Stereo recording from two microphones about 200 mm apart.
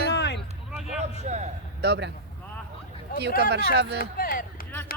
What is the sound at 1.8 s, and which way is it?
Speech, 55° right (ahead or behind).